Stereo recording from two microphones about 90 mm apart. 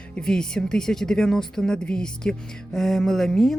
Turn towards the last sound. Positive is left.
turn(degrees=5)  # may be behind; listen again after turning